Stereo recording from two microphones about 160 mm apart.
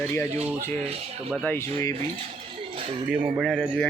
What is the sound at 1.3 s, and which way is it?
Speech, 10° left (ahead or behind).